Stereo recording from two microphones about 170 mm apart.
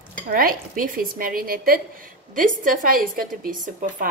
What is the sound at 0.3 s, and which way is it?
A woman's voice, 55° right (ahead or behind).